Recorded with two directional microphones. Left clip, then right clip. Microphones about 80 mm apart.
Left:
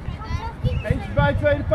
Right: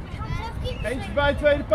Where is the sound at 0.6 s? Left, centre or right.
Right.